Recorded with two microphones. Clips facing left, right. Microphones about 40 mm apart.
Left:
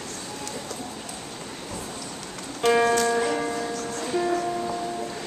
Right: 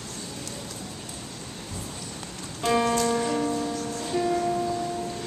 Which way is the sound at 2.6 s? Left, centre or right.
Left.